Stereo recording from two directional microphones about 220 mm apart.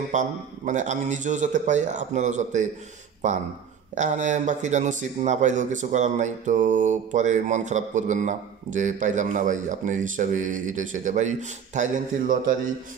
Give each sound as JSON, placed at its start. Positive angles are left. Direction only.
{"t": 0.1, "sound": "speech", "side_deg": -35}
{"t": 3.9, "sound": "speech", "side_deg": -35}